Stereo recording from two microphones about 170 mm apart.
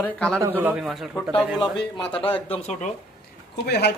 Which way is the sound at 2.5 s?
40° left (ahead or behind).